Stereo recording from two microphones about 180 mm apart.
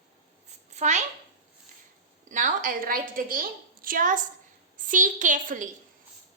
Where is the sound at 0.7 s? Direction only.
40° right (ahead or behind).